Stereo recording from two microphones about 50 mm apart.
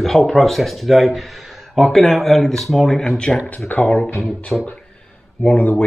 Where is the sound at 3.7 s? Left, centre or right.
Left.